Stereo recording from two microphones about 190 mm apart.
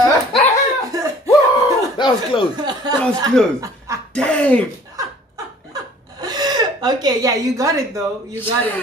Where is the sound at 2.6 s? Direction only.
20° right (ahead or behind).